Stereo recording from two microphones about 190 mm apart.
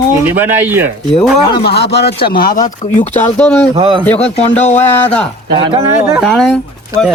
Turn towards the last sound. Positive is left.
turn(degrees=5)  # may be behind; listen again after turning